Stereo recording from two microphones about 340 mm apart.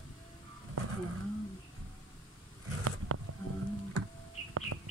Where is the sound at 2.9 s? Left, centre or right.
Right.